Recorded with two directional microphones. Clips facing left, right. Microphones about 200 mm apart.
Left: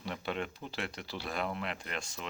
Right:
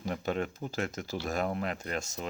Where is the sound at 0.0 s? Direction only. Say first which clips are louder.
Right 5 dB; 45° right (ahead or behind).